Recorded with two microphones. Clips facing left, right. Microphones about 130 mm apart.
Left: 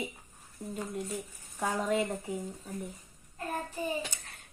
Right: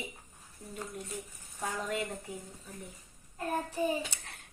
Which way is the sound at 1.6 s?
40° left (ahead or behind).